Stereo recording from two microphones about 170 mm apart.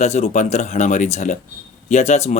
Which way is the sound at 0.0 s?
40° left (ahead or behind).